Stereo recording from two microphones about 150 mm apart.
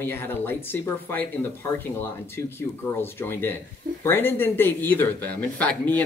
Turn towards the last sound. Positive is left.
turn(degrees=10)  # may be behind; listen again after turning